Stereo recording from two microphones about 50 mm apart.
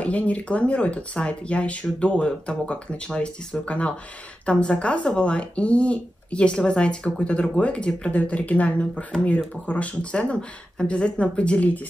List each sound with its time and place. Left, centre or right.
0.0 s speech: left
3.6 s speech: left